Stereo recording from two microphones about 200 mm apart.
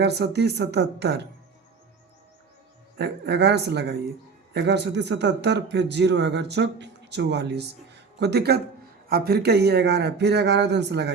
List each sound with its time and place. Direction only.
0.0 s a man's voice: 55° right (ahead or behind)
3.0 s a man's voice: 55° right (ahead or behind)